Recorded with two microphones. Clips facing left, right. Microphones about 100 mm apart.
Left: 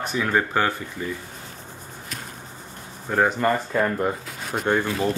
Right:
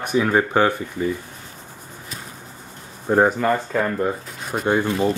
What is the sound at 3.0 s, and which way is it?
Speech, 25° right (ahead or behind).